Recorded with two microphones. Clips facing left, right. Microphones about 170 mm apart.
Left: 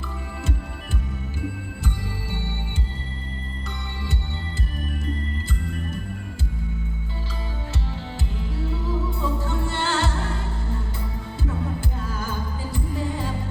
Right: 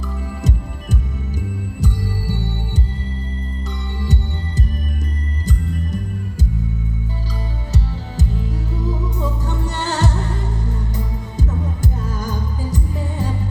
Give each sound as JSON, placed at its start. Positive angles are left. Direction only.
{"t": 1.4, "sound": "music", "side_deg": -40}
{"t": 8.7, "sound": "music", "side_deg": -40}